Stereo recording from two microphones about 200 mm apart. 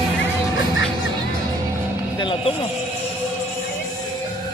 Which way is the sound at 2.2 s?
25° left (ahead or behind).